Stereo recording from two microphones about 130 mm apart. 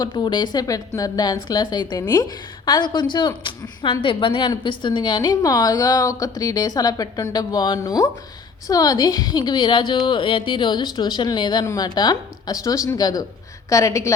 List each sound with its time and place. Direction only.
0.0 s a woman's voice: 35° left (ahead or behind)